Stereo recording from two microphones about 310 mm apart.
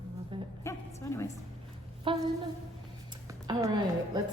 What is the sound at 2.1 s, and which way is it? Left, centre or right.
Speech, centre.